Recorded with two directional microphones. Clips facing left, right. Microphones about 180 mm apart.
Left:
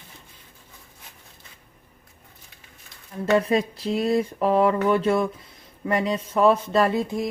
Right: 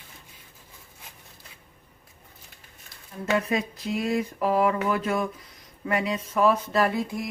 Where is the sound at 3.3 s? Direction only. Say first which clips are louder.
Left 5 dB; 30° left (ahead or behind).